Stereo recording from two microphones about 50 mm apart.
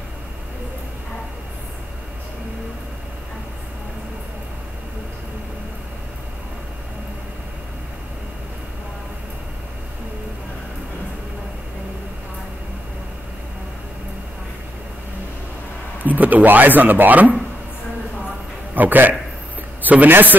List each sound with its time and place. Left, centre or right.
16.0 s speech: right
18.8 s a man's voice: right